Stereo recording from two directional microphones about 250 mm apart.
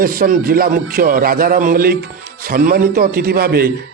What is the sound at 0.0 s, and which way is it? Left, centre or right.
A man's voice, right.